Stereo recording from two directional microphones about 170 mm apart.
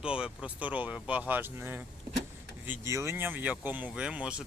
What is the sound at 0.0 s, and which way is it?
Speech, 5° right (ahead or behind).